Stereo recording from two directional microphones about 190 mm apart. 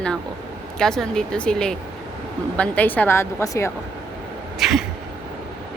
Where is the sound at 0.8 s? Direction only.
5° left (ahead or behind).